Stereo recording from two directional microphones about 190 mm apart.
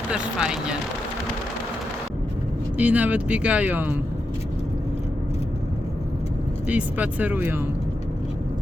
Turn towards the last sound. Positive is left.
turn(degrees=-10)  # may be behind; listen again after turning